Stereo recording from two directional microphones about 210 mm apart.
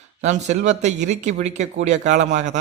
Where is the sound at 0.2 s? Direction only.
35° right (ahead or behind).